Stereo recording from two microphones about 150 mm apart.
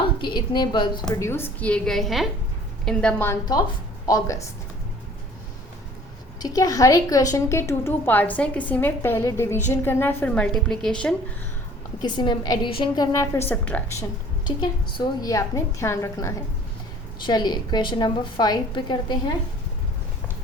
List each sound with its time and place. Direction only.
0.0 s a woman's voice: 30° left (ahead or behind)
1.2 s a woman's voice: 15° left (ahead or behind)
4.0 s speech: 20° left (ahead or behind)
6.4 s a woman's voice: 25° left (ahead or behind); by 11.1 s 5° left (ahead or behind)
12.0 s a woman's voice: 30° left (ahead or behind)
13.5 s a woman's voice: 10° left (ahead or behind)
14.4 s a woman's voice: 30° left (ahead or behind)